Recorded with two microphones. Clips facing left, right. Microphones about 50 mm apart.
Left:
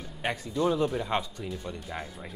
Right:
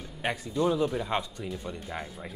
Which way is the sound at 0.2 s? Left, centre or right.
Centre.